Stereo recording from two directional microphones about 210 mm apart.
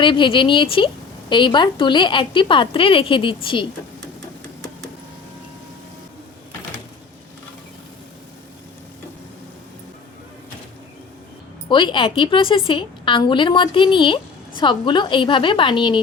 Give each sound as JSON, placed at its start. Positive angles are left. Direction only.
{"t": 0.0, "sound": "a woman's voice", "side_deg": 25}
{"t": 11.7, "sound": "a woman's voice", "side_deg": 20}